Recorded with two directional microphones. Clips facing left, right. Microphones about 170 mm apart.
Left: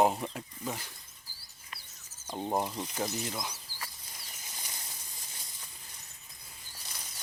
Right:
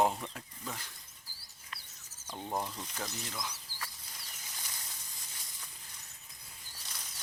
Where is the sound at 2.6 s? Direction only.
15° left (ahead or behind).